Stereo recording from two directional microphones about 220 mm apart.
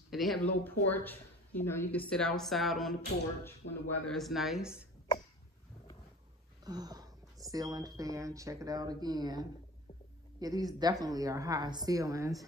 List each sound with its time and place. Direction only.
0.1 s a woman's voice: centre (ahead or behind)
6.6 s a sound: 15° right (ahead or behind)
7.5 s a woman's voice: 15° right (ahead or behind)